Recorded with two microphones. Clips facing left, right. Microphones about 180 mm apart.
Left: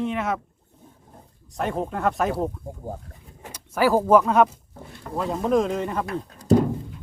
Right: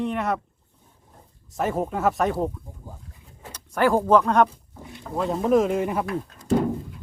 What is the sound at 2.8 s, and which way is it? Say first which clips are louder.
Speech: left 12 dB; 55° left (ahead or behind).